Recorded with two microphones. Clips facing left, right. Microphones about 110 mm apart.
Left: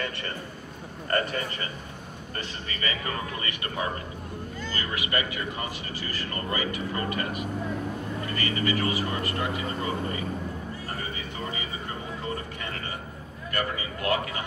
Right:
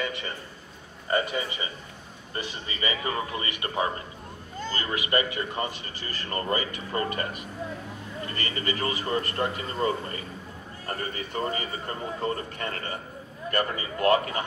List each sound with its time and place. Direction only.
1.0 s a man's voice: 10° right (ahead or behind); by 7.2 s 35° right (ahead or behind)
8.4 s a man's voice: 35° right (ahead or behind)
13.5 s a man's voice: 40° right (ahead or behind)